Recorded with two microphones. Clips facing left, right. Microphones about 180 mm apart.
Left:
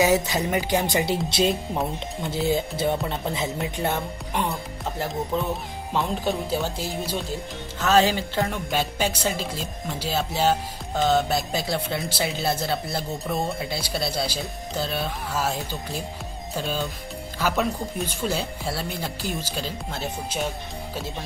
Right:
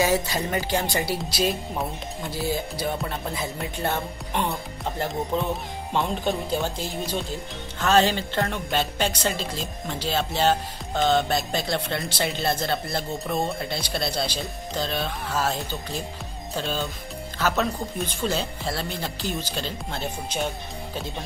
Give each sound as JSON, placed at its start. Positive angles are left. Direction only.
{"t": 0.0, "sound": "speech", "side_deg": 20}
{"t": 3.9, "sound": "speech", "side_deg": 0}